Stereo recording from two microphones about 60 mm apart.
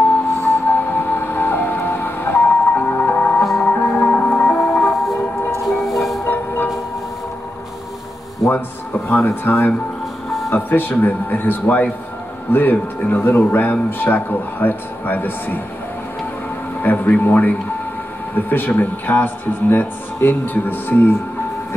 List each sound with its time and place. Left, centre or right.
0.0 s music: left
4.8 s music: centre
6.2 s music: left
9.1 s speech: left
10.5 s speech: left
16.8 s speech: left